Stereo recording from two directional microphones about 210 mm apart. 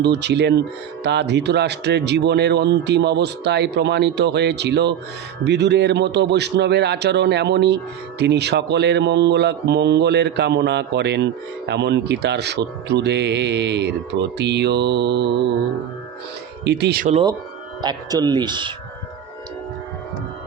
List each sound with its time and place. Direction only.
0.0 s speech: 55° right (ahead or behind)
16.6 s speech: 55° right (ahead or behind)
17.8 s speech: 20° right (ahead or behind)